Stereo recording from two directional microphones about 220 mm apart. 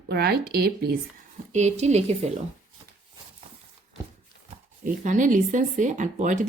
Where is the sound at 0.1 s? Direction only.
45° right (ahead or behind).